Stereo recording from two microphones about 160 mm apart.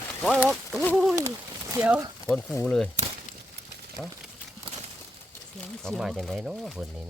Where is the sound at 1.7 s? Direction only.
10° right (ahead or behind).